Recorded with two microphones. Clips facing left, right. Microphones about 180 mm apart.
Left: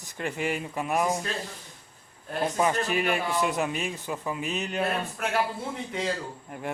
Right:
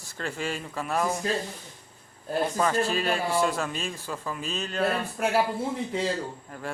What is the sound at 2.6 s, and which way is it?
Speech, 15° left (ahead or behind).